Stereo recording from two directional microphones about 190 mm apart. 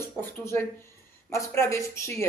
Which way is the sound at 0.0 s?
10° left (ahead or behind).